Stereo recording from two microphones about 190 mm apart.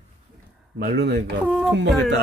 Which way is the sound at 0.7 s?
60° right (ahead or behind).